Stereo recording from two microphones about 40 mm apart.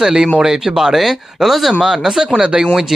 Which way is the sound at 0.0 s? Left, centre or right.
Centre.